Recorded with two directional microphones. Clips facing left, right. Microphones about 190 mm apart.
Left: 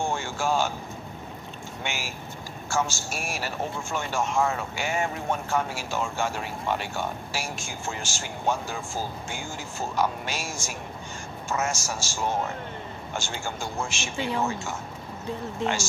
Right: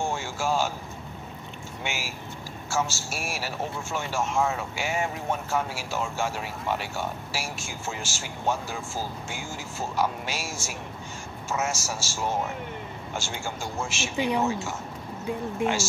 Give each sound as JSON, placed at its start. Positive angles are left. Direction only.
{"t": 0.0, "sound": "a sound", "side_deg": -5}
{"t": 1.9, "sound": "speech", "side_deg": -5}
{"t": 14.1, "sound": "speech", "side_deg": -15}